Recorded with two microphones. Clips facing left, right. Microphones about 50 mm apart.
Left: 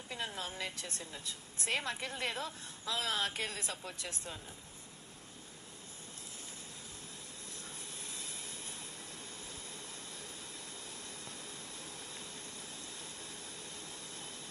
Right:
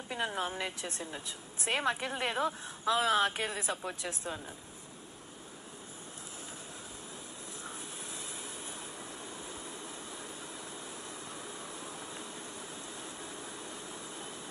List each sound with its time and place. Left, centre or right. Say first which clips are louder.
0.1 s a woman's voice: right 7 dB; right
11.4 s vehicle: right 5 dB; right